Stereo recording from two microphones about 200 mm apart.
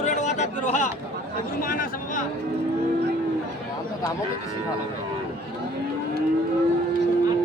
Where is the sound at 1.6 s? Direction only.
45° left (ahead or behind).